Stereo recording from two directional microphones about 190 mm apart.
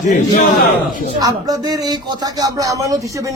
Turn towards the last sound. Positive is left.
turn(degrees=-15)  # may be behind; listen again after turning